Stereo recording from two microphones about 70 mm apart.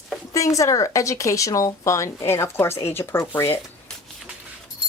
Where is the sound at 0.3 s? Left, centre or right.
Left.